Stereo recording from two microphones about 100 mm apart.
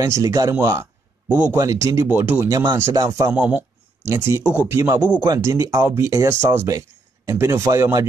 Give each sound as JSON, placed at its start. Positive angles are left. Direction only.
{"t": 0.0, "sound": "speech", "side_deg": -35}
{"t": 1.3, "sound": "speech", "side_deg": -20}
{"t": 1.6, "sound": "speech", "side_deg": -35}
{"t": 2.0, "sound": "speech", "side_deg": -20}
{"t": 2.5, "sound": "speech", "side_deg": -50}
{"t": 3.1, "sound": "speech", "side_deg": -35}
{"t": 3.3, "sound": "speech", "side_deg": -15}
{"t": 4.0, "sound": "speech", "side_deg": -30}